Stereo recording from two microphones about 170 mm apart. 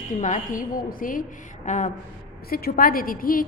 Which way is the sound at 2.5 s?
60° left (ahead or behind).